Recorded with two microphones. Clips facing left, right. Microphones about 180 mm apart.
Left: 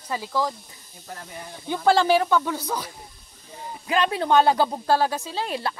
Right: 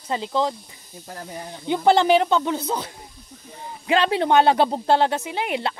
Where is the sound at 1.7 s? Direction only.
20° right (ahead or behind).